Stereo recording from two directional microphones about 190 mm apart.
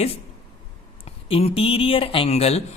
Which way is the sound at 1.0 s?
30° left (ahead or behind).